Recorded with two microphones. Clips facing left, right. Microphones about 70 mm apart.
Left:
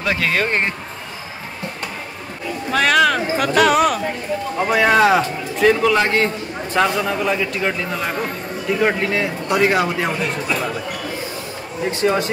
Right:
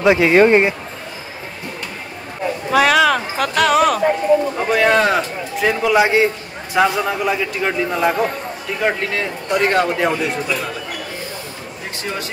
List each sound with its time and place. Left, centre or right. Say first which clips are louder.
0.0 s a man's voice: right 8 dB; centre
2.7 s a man's voice: right 2 dB; centre
5.7 s a man's voice: right 1 dB; centre
8.7 s a man's voice: left 1 dB; centre
12.0 s speech: left 8 dB; left